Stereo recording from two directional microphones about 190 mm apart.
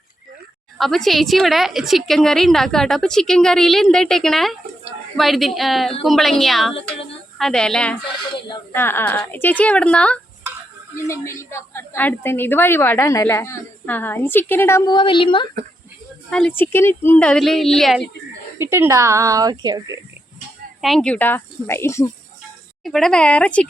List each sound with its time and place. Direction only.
0.8 s a woman's voice: centre (ahead or behind)
14.9 s speech: 25° left (ahead or behind)
16.3 s a woman's voice: 5° left (ahead or behind)
18.6 s speech: 15° right (ahead or behind)
20.8 s a woman's voice: 5° left (ahead or behind)
22.8 s a woman's voice: centre (ahead or behind)